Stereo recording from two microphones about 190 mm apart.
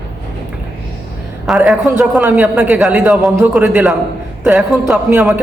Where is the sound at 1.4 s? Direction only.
Centre (ahead or behind).